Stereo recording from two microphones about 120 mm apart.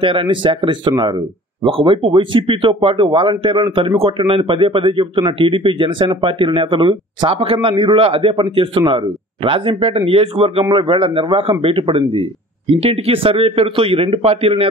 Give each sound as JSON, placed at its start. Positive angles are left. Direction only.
{"t": 0.0, "sound": "a man's voice", "side_deg": -45}